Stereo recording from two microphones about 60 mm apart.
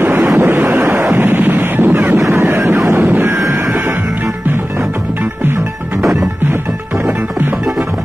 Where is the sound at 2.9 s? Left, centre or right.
Right.